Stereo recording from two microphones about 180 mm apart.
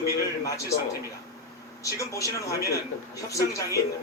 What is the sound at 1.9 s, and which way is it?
Speech, 15° left (ahead or behind).